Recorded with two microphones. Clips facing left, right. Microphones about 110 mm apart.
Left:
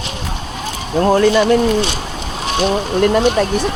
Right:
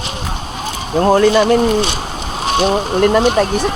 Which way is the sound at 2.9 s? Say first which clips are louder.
Even; 45° right (ahead or behind).